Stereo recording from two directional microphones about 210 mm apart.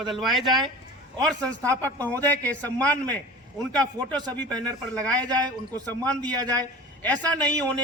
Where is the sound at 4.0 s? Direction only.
15° right (ahead or behind).